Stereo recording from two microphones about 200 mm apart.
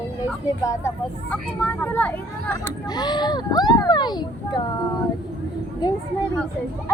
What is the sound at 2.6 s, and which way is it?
Speech, 20° left (ahead or behind).